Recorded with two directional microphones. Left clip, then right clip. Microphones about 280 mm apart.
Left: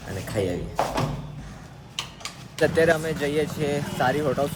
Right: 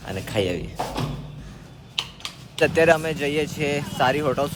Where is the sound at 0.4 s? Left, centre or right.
Right.